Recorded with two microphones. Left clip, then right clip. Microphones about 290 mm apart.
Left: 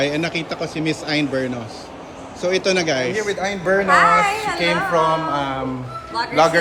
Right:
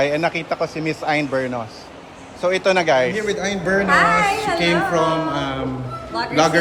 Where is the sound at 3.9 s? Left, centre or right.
Centre.